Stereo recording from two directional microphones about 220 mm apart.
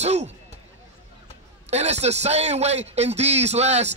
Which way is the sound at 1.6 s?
30° right (ahead or behind).